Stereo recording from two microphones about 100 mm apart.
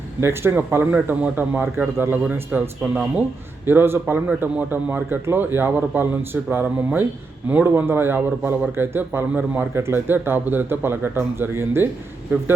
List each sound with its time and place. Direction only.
0.2 s a man's voice: 25° right (ahead or behind)